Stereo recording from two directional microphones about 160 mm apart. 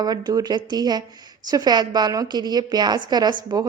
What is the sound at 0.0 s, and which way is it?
A woman's voice, 25° right (ahead or behind).